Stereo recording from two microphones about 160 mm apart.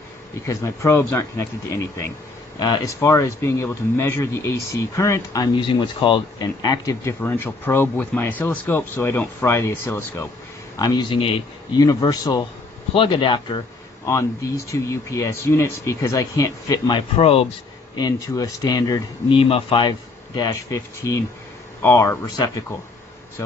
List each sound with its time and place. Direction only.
0.5 s speech: 15° left (ahead or behind)
2.6 s speech: 25° left (ahead or behind)
7.2 s speech: 10° left (ahead or behind); by 13.6 s 30° left (ahead or behind)
14.0 s speech: 20° left (ahead or behind)
17.2 s speech: 35° left (ahead or behind)
17.9 s speech: 25° left (ahead or behind)